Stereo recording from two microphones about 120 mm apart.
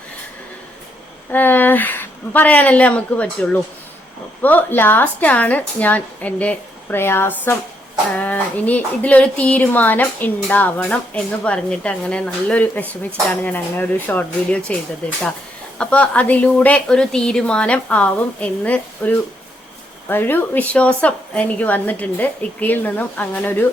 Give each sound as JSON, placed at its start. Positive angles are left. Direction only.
{"t": 1.3, "sound": "speech", "side_deg": 15}